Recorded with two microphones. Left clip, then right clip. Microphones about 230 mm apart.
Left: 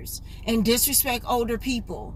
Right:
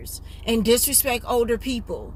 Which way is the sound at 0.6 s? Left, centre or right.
Centre.